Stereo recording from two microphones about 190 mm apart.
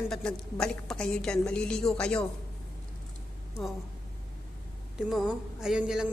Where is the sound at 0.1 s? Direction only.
5° left (ahead or behind).